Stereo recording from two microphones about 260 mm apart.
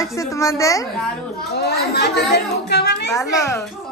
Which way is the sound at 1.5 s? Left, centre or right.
Left.